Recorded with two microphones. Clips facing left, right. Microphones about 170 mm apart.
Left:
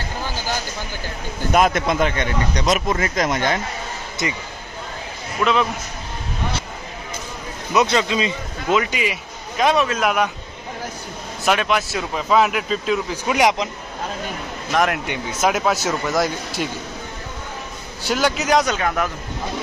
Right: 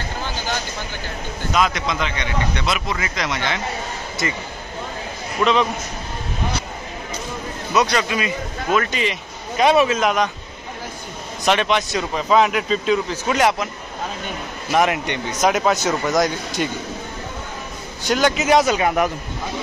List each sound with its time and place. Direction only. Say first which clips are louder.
1.5 s a man's voice: left 4 dB; 50° left (ahead or behind)
4.2 s a man's voice: even; 20° left (ahead or behind)
5.4 s speech: right 1 dB; 5° left (ahead or behind)
7.7 s speech: left 1 dB; 20° left (ahead or behind)
8.7 s a man's voice: even; 10° left (ahead or behind)
11.4 s speech: right 1 dB; 5° left (ahead or behind)
14.7 s speech: right 2 dB; centre (ahead or behind)
18.0 s speech: right 2 dB; 5° left (ahead or behind)
18.8 s a man's voice: right 3 dB; 15° right (ahead or behind)